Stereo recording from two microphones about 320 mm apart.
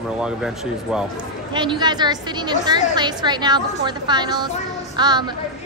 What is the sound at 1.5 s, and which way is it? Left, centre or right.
A woman's voice, centre.